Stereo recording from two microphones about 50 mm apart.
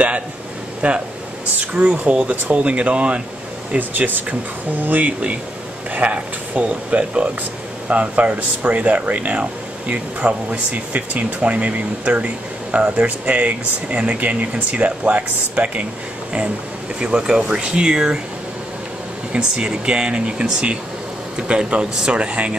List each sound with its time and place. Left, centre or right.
0.8 s speech: right
3.7 s speech: right
17.0 s speech: centre
19.3 s speech: centre